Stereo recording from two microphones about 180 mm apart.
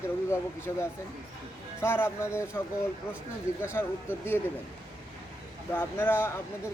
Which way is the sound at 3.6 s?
15° left (ahead or behind).